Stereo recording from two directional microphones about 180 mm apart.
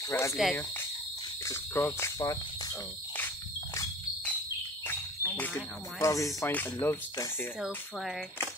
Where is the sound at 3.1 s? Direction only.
15° left (ahead or behind).